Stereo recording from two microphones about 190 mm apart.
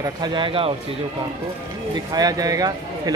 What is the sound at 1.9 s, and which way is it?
Speech, 20° right (ahead or behind).